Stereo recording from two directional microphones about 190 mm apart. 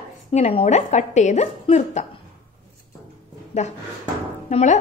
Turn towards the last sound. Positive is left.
turn(degrees=40)  # may be behind; listen again after turning